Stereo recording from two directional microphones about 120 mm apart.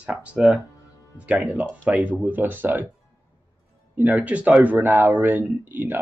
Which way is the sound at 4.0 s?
15° right (ahead or behind).